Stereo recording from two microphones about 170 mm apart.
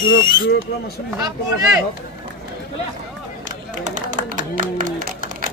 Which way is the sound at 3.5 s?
50° right (ahead or behind).